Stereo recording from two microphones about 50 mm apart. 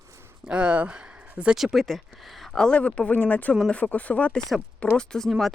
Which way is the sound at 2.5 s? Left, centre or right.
Left.